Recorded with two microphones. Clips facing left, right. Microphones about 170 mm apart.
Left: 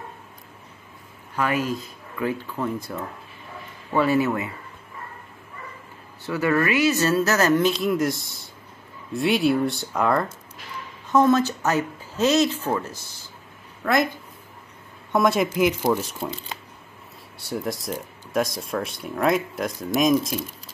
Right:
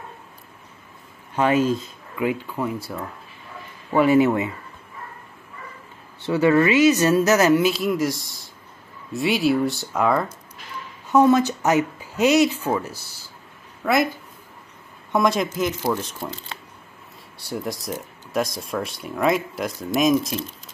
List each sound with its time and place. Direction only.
1.3 s speech: 25° right (ahead or behind)
6.2 s speech: 25° right (ahead or behind); by 13.2 s 10° right (ahead or behind)
15.1 s speech: 5° left (ahead or behind)
17.4 s speech: centre (ahead or behind)